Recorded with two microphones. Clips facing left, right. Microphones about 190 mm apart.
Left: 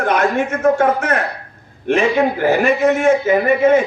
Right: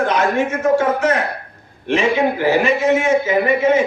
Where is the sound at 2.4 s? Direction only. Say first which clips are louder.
Left 1 dB; 55° left (ahead or behind).